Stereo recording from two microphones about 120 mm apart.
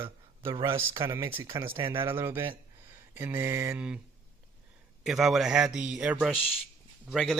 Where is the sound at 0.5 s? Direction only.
45° right (ahead or behind).